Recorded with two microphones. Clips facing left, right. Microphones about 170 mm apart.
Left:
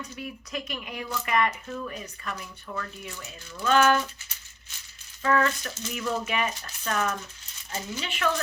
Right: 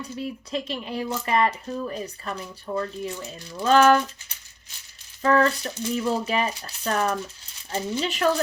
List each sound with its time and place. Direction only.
0.0 s speech: 30° right (ahead or behind)
5.2 s speech: 35° right (ahead or behind)